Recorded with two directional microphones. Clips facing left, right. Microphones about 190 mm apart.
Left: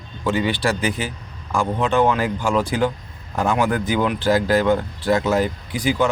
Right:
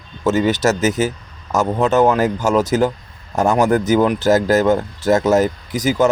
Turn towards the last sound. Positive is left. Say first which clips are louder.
# right 3 dB
turn(degrees=-40)  # may be behind; listen again after turning